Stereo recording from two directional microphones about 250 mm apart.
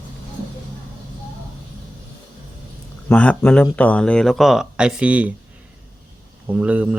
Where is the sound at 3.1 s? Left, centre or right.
Centre.